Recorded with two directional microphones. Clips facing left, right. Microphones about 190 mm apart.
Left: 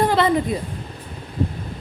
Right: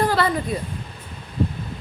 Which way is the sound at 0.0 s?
20° left (ahead or behind).